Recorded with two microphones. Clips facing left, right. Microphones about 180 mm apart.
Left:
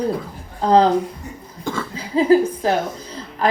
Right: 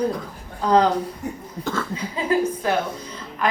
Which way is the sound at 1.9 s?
30° left (ahead or behind).